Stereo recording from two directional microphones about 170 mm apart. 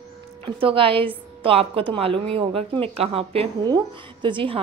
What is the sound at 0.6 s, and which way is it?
A woman's voice, 30° right (ahead or behind).